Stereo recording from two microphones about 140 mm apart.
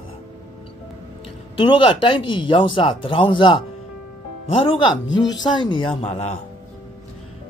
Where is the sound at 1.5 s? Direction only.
35° left (ahead or behind).